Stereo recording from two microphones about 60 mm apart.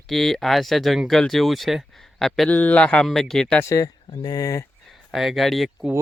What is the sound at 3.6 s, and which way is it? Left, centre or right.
Speech, left.